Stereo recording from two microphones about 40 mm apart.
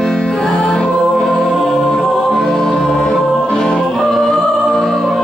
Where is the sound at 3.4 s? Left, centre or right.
Centre.